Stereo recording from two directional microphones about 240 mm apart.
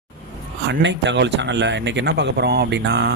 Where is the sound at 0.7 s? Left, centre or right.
Right.